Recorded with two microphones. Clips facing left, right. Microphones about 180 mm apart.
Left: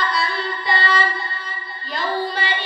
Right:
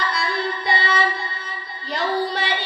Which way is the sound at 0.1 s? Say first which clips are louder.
Even; 65° right (ahead or behind).